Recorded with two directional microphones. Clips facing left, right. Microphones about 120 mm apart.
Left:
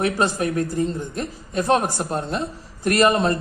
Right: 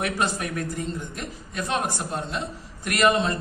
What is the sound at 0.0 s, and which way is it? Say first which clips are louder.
Speech: left 5 dB; 35° left (ahead or behind).